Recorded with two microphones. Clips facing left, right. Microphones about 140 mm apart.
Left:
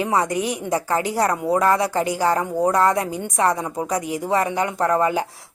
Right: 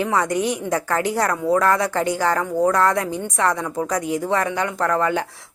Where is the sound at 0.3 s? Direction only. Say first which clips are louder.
Right 2 dB; 35° right (ahead or behind).